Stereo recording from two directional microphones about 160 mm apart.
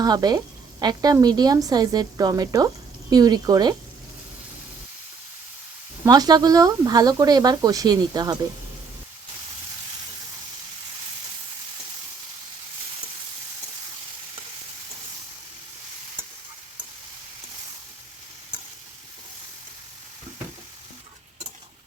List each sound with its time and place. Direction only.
0.0 s a woman's voice: 25° right (ahead or behind)
6.1 s a woman's voice: 25° right (ahead or behind)